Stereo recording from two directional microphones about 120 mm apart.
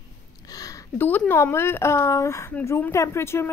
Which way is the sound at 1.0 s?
15° left (ahead or behind).